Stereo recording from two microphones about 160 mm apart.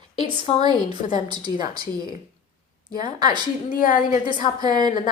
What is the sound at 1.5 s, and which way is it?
Speech, 25° left (ahead or behind).